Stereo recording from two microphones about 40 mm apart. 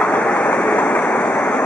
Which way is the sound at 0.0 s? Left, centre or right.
Left.